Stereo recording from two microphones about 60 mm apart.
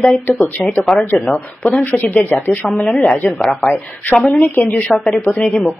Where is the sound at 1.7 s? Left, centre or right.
Left.